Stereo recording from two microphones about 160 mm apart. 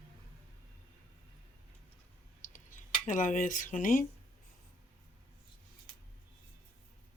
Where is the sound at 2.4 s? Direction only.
55° left (ahead or behind).